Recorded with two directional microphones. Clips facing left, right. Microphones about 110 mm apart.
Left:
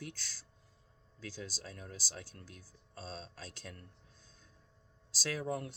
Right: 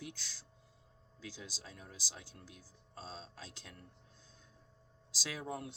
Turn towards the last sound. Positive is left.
turn(degrees=-15)  # may be behind; listen again after turning